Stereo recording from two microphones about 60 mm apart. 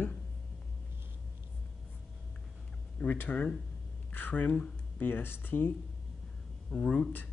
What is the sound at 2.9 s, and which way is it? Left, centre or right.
Speech, left.